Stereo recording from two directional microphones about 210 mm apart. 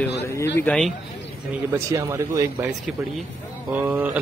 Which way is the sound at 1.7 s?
15° right (ahead or behind).